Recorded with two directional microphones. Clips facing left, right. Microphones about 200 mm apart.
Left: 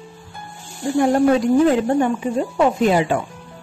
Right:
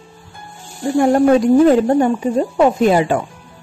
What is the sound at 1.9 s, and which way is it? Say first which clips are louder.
Speech: right 4 dB; 40° right (ahead or behind).